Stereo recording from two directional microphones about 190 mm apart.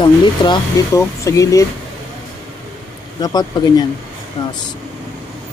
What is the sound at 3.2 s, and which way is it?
Speech, 20° left (ahead or behind).